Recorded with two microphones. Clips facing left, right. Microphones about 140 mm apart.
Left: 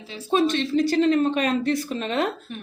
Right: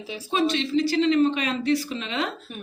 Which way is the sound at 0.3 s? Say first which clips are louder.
Left 2 dB; 50° left (ahead or behind).